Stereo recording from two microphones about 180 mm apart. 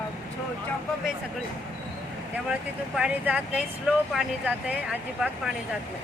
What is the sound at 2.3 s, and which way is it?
Speech, 5° right (ahead or behind).